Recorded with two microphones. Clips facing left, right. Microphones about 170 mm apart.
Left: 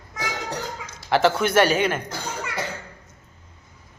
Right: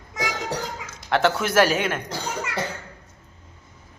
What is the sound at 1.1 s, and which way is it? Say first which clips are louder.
Speech: left 2 dB; centre (ahead or behind).